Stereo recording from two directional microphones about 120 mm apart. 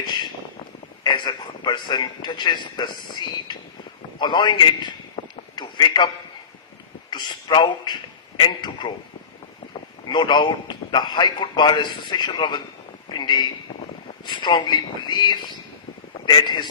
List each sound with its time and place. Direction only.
1.0 s a man's voice: 40° left (ahead or behind)
4.2 s a sound: 40° left (ahead or behind)
7.1 s a man's voice: 40° left (ahead or behind)
10.1 s a man's voice: 40° left (ahead or behind)
13.1 s a sound: 40° left (ahead or behind)
14.3 s a man's voice: 40° left (ahead or behind)